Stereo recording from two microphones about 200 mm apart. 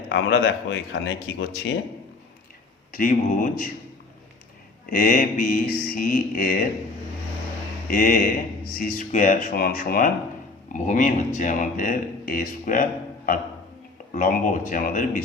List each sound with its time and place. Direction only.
0.1 s speech: 65° left (ahead or behind)
2.9 s mantra: 45° left (ahead or behind)
4.9 s mantra: 45° left (ahead or behind)
7.9 s speech: 40° left (ahead or behind)